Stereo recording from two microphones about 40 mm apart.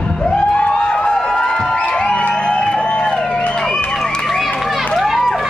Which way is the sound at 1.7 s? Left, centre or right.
Left.